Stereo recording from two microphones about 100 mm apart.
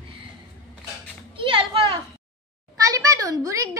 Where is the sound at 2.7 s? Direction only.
35° right (ahead or behind).